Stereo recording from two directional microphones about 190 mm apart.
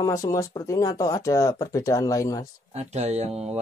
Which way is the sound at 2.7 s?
35° right (ahead or behind).